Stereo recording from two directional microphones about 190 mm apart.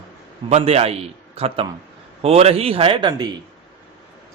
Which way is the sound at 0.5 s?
35° right (ahead or behind).